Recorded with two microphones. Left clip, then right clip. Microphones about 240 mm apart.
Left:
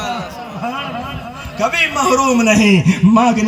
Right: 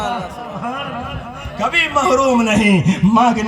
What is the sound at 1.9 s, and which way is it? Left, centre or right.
Speech, right.